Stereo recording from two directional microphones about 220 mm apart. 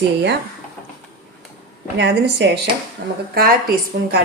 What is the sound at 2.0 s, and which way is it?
Speech, 50° right (ahead or behind).